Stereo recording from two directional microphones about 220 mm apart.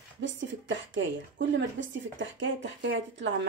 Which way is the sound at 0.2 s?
55° right (ahead or behind).